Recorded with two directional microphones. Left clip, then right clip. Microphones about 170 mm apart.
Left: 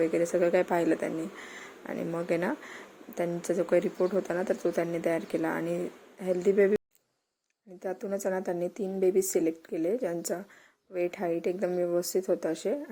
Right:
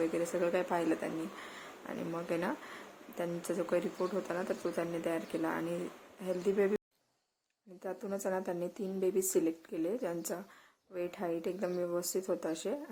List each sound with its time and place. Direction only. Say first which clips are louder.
0.1 s speech: left 7 dB; 20° left (ahead or behind)
7.8 s a woman's voice: left 6 dB; 15° left (ahead or behind)